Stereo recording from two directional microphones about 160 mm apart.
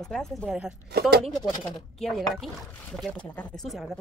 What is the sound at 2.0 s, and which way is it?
Speech, centre (ahead or behind).